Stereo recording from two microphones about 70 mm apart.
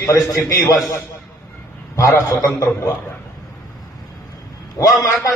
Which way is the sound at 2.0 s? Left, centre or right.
Left.